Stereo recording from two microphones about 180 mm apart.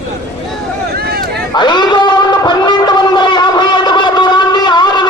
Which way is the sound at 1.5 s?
25° left (ahead or behind).